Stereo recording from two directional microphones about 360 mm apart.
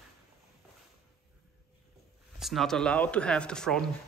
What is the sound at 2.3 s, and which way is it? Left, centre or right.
Speech, centre.